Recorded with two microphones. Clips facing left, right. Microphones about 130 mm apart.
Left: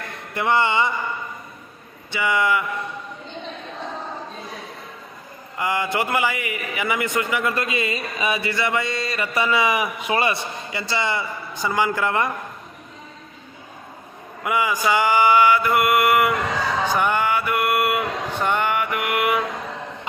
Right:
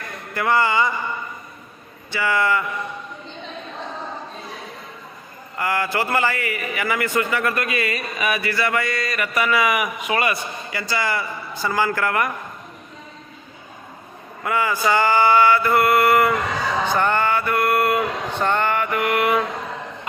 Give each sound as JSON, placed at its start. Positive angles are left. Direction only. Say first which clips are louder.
{"t": 0.3, "sound": "a man's voice", "louder": "right 1 dB", "side_deg": 25}
{"t": 2.0, "sound": "mantra", "louder": "even", "side_deg": 15}
{"t": 5.5, "sound": "a man's voice", "louder": "even", "side_deg": 20}
{"t": 14.4, "sound": "mantra", "louder": "even", "side_deg": 15}
{"t": 16.8, "sound": "a sound", "louder": "right 1 dB", "side_deg": 10}